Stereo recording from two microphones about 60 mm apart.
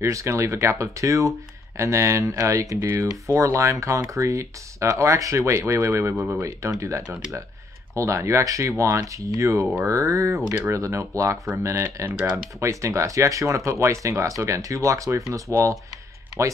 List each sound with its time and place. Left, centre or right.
0.0 s speech: right
10.7 s speech: right